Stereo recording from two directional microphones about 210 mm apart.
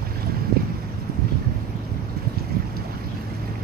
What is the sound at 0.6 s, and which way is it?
Wind, 45° right (ahead or behind).